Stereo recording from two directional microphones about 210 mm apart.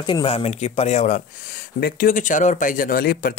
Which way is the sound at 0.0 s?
25° left (ahead or behind).